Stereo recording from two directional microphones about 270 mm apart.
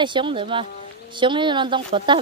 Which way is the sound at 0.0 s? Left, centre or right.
Centre.